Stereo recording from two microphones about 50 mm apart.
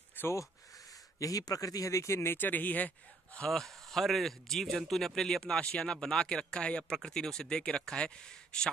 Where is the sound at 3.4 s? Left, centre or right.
Centre.